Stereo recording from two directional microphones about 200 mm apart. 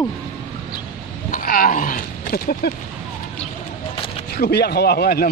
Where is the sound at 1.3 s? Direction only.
45° left (ahead or behind).